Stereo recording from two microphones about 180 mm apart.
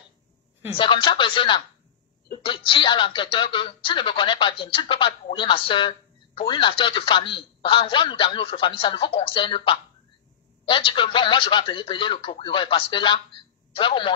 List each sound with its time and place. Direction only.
0.7 s speech: 30° left (ahead or behind)